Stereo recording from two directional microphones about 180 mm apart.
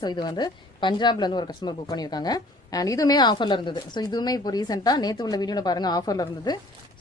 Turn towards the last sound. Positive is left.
turn(degrees=20)  # may be behind; listen again after turning